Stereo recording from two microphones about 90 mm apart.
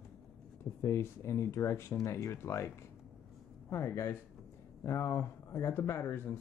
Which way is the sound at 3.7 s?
30° left (ahead or behind).